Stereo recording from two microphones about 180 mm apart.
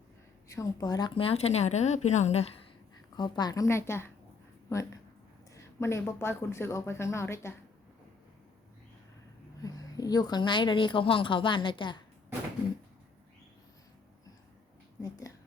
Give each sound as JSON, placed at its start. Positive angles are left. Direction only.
{"t": 0.4, "sound": "a woman's voice", "side_deg": 20}
{"t": 3.2, "sound": "speech", "side_deg": 25}
{"t": 9.6, "sound": "speech", "side_deg": 20}
{"t": 15.0, "sound": "speech", "side_deg": 20}